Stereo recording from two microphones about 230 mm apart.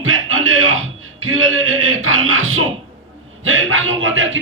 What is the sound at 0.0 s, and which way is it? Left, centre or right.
Music, right.